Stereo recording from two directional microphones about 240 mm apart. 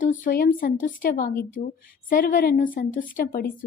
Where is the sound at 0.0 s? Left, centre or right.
Left.